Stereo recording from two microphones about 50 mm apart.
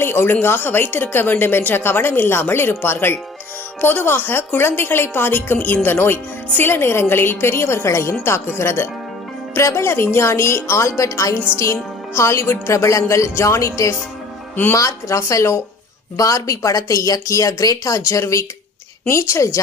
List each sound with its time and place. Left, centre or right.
0.0 s a woman's voice: left
9.6 s speech: left
11.5 s speech: left
14.7 s speech: left
19.0 s speech: left